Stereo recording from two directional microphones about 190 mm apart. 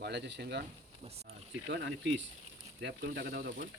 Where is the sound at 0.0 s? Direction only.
60° right (ahead or behind).